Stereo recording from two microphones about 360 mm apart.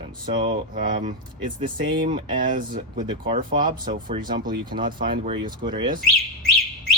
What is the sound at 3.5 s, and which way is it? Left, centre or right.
Speech, centre.